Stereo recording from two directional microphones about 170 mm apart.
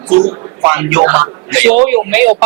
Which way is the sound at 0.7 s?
15° right (ahead or behind).